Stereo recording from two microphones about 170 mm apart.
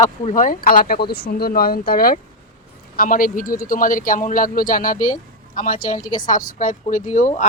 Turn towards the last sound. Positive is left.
turn(degrees=45)  # may be behind; listen again after turning